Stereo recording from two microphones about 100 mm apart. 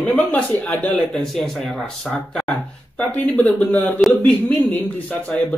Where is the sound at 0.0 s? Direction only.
15° left (ahead or behind).